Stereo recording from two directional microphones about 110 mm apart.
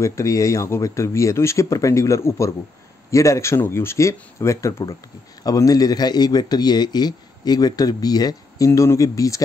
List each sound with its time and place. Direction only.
0.0 s a man's voice: 30° left (ahead or behind)